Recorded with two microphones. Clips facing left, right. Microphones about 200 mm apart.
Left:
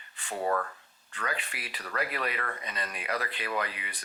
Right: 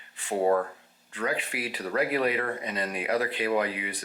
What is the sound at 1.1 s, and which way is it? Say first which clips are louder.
Speech: right 6 dB; 10° right (ahead or behind).